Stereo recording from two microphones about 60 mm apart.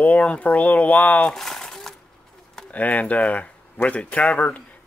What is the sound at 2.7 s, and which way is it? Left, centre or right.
A man's voice, left.